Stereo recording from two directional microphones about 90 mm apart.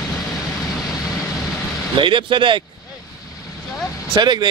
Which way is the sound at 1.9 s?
65° right (ahead or behind).